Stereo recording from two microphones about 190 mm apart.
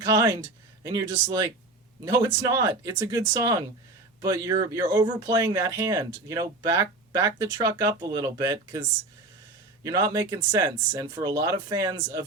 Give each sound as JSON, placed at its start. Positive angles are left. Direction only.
{"t": 0.0, "sound": "speech", "side_deg": -20}
{"t": 9.8, "sound": "speech", "side_deg": -15}